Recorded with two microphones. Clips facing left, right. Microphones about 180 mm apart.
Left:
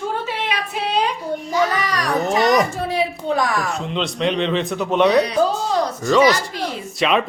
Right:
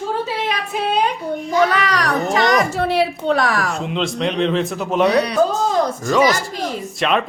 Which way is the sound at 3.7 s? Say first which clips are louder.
Right 2 dB; centre (ahead or behind).